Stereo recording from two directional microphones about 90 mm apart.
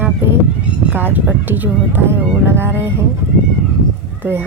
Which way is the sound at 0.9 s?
20° right (ahead or behind).